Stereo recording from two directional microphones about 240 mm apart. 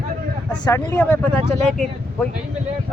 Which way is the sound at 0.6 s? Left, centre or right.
Centre.